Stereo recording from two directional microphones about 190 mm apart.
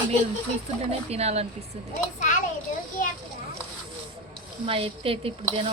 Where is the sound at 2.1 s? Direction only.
40° left (ahead or behind).